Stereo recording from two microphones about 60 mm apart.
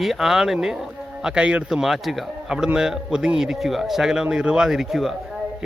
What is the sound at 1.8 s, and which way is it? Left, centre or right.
A man's voice, centre.